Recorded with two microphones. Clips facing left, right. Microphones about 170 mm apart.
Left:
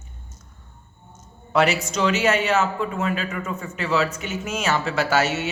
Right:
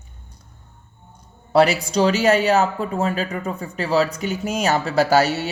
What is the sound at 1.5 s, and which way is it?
Speech, 35° right (ahead or behind).